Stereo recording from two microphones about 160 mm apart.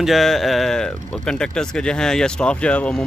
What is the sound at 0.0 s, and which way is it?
Speech, centre (ahead or behind).